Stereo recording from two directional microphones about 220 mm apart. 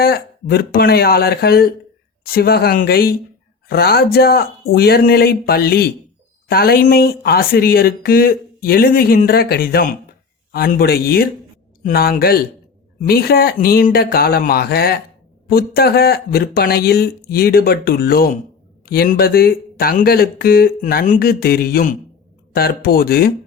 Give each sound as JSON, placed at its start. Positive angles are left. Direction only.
{"t": 0.0, "sound": "speech", "side_deg": 45}